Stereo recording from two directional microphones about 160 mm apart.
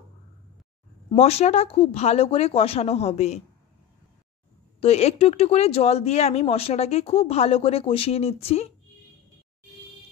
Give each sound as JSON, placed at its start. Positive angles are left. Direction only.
{"t": 1.1, "sound": "speech", "side_deg": 40}
{"t": 4.7, "sound": "speech", "side_deg": 40}